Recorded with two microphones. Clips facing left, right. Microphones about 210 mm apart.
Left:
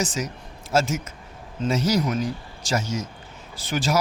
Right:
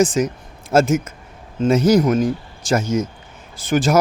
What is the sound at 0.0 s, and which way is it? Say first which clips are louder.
Speech: right 10 dB; 55° right (ahead or behind).